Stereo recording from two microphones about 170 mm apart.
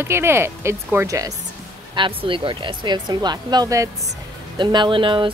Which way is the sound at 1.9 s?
30° right (ahead or behind).